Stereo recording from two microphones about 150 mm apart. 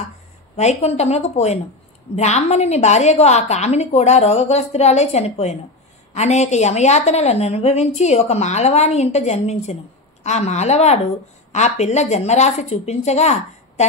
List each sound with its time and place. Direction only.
0.6 s a woman's voice: 45° left (ahead or behind)